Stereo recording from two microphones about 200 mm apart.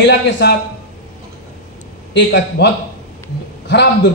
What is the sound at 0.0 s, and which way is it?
Speech, 55° left (ahead or behind).